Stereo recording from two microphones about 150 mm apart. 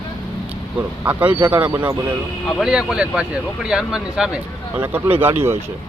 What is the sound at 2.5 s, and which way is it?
Speech, centre (ahead or behind).